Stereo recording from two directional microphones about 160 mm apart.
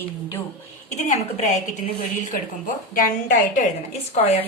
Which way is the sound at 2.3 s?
55° left (ahead or behind).